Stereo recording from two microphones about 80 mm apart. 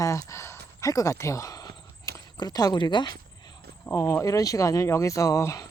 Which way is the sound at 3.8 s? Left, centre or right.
Left.